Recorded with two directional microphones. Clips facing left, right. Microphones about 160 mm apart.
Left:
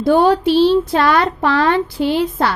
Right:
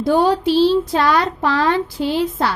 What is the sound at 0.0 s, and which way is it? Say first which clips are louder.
Speech: left 3 dB; 60° left (ahead or behind).